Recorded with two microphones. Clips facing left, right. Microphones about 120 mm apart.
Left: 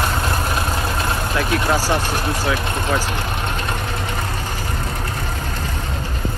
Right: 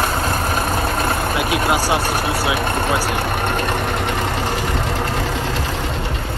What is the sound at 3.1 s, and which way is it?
Vehicle, 60° right (ahead or behind).